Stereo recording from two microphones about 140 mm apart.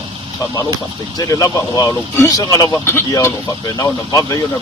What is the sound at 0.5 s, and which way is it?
Speech, 25° left (ahead or behind).